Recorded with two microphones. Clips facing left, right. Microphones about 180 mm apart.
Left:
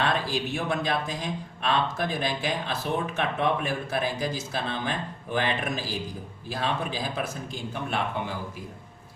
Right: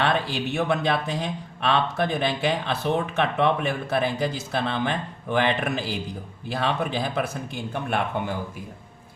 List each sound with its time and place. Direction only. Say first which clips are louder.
0.0 s a man's voice: right 3 dB; 65° right (ahead or behind)